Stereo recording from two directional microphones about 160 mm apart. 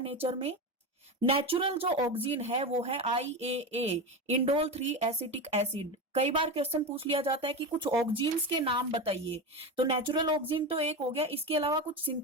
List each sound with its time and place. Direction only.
0.0 s a woman's voice: 40° right (ahead or behind)